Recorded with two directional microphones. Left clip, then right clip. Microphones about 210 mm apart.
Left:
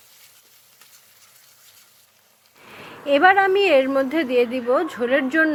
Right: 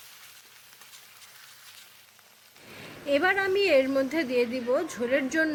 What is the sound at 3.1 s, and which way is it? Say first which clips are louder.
A woman's voice: left 9 dB; 10° left (ahead or behind).